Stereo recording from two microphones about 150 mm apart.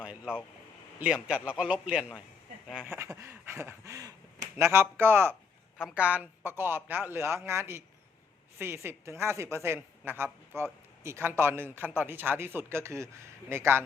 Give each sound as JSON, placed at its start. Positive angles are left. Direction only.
{"t": 0.0, "sound": "a man's voice", "side_deg": -5}
{"t": 5.3, "sound": "a sound", "side_deg": 10}
{"t": 5.9, "sound": "a man's voice", "side_deg": -10}